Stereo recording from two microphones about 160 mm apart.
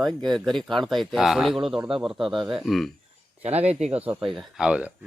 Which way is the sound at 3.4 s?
40° right (ahead or behind).